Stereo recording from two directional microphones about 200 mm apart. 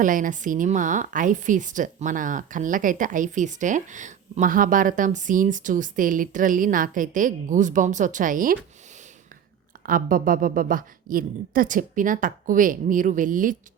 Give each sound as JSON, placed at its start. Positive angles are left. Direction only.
{"t": 0.0, "sound": "a woman's voice", "side_deg": -40}
{"t": 9.8, "sound": "speech", "side_deg": -45}